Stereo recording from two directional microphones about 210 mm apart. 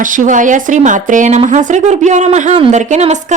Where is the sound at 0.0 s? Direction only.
40° right (ahead or behind).